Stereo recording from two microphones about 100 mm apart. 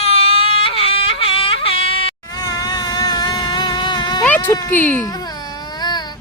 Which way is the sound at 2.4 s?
40° left (ahead or behind).